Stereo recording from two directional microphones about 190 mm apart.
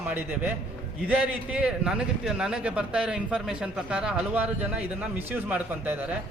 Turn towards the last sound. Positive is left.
turn(degrees=-10)  # may be behind; listen again after turning